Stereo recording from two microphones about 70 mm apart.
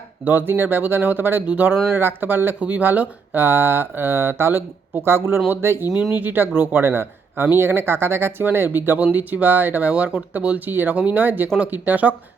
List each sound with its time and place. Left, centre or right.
0.3 s speech: right
5.9 s speech: left
6.1 s speech: right